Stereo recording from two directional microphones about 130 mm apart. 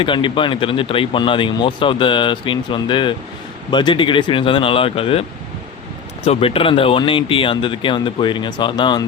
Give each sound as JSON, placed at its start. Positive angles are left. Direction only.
{"t": 0.0, "sound": "speech", "side_deg": 40}
{"t": 6.2, "sound": "speech", "side_deg": 50}